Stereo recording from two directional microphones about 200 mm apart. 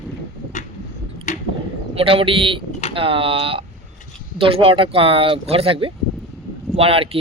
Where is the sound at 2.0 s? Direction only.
25° right (ahead or behind).